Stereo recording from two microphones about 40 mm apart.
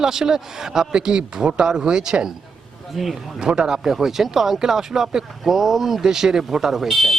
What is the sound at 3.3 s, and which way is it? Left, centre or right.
Speech, centre.